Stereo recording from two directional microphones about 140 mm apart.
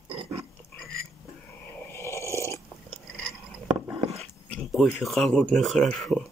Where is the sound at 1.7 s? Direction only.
20° left (ahead or behind).